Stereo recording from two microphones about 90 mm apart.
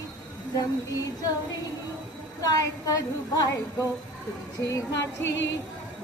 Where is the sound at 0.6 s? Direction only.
40° left (ahead or behind).